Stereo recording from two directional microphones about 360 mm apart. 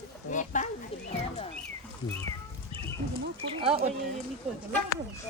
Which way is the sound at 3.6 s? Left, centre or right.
Centre.